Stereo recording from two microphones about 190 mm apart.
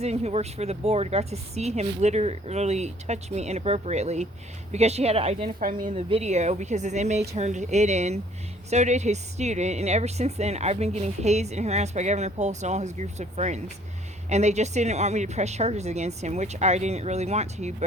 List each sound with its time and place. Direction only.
0.0 s a woman's voice: 35° right (ahead or behind)